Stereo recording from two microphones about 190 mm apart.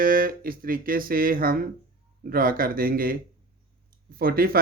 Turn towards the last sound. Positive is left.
turn(degrees=-50)  # may be behind; listen again after turning